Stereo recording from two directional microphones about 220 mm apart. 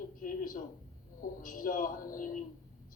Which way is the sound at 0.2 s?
40° left (ahead or behind).